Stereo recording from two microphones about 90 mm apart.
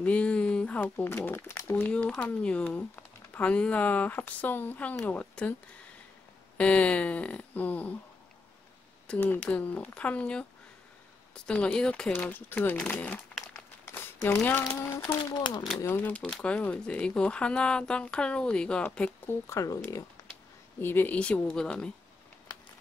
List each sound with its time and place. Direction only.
0.0 s speech: 15° left (ahead or behind)
1.0 s speech: 25° left (ahead or behind)
1.9 s speech: 10° left (ahead or behind)
6.6 s speech: 15° left (ahead or behind)
9.0 s a sound: 10° left (ahead or behind)
9.3 s speech: 15° left (ahead or behind)
12.1 s speech: 20° left (ahead or behind)
13.8 s crumpling: 30° left (ahead or behind)
14.8 s speech: 35° left (ahead or behind)
15.9 s speech: 20° left (ahead or behind)
16.2 s speech: 10° left (ahead or behind)
19.5 s speech: 35° left (ahead or behind)
20.8 s speech: 20° left (ahead or behind)